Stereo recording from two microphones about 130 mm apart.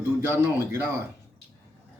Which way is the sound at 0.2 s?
20° right (ahead or behind).